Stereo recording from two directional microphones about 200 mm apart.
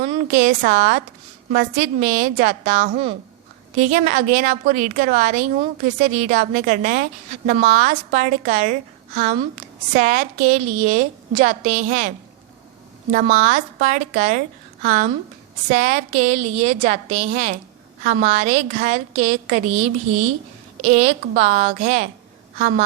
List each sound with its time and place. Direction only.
0.0 s a woman's voice: 40° right (ahead or behind)